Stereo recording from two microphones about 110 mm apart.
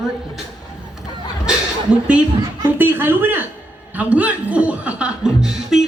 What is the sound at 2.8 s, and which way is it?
A woman's voice, 20° right (ahead or behind).